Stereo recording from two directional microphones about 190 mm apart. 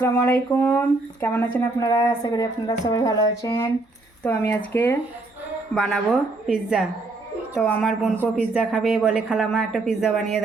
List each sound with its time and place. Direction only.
0.0 s speech: 15° left (ahead or behind)
5.7 s speech: centre (ahead or behind)